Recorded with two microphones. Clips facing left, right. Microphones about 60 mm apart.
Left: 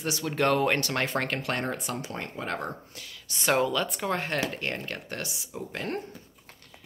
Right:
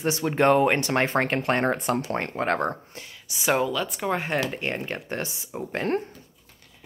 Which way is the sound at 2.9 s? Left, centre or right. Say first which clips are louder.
Right 3 dB; right.